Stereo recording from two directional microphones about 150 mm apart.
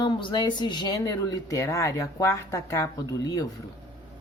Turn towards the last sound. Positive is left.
turn(degrees=25)  # may be behind; listen again after turning